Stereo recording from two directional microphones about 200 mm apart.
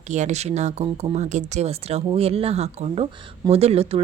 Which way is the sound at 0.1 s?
35° right (ahead or behind).